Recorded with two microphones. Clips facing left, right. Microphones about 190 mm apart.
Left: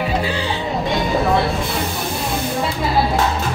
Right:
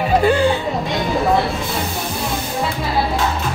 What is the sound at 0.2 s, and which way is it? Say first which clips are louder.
Music: right 8 dB; 50° right (ahead or behind).